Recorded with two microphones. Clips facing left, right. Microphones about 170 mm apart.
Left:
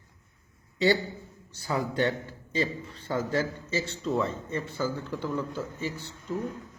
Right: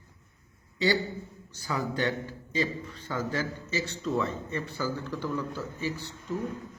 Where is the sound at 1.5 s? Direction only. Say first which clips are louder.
Left 3 dB; 25° left (ahead or behind).